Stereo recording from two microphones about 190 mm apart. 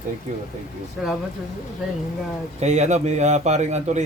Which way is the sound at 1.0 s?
Centre (ahead or behind).